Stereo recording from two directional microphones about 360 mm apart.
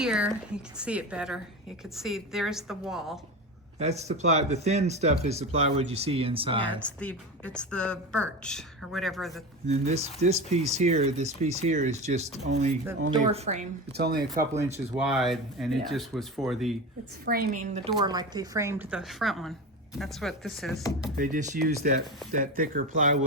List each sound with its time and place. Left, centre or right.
0.0 s speech: centre
3.8 s speech: centre
6.6 s speech: centre
9.6 s speech: centre
14.3 s speech: centre
17.2 s speech: right; by 21.1 s centre
21.2 s speech: right